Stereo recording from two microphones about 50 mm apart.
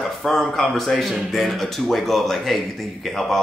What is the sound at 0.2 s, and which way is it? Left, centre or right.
Speech, centre.